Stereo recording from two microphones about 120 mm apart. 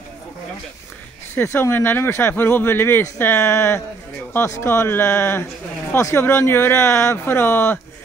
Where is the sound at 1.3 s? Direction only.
20° left (ahead or behind).